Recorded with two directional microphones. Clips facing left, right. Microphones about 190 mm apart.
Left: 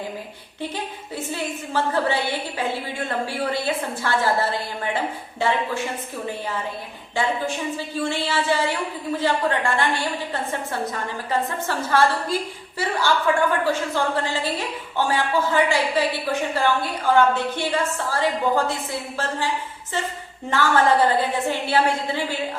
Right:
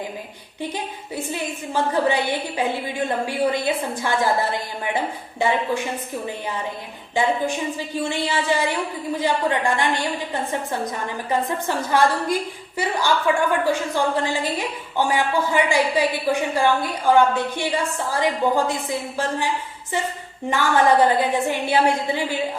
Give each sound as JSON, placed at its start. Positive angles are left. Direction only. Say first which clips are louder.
{"t": 1.3, "sound": "a woman's voice", "louder": "left 1 dB", "side_deg": -15}
{"t": 7.2, "sound": "a woman's voice", "louder": "right 3 dB", "side_deg": -15}
{"t": 20.5, "sound": "a woman's voice", "louder": "right 1 dB", "side_deg": -15}